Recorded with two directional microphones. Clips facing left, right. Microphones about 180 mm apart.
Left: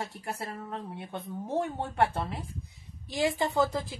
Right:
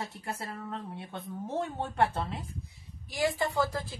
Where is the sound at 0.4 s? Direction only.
15° left (ahead or behind).